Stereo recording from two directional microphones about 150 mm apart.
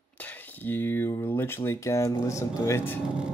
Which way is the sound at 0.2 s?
10° left (ahead or behind).